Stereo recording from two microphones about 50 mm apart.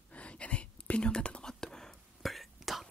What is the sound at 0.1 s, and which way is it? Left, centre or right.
Whispering, left.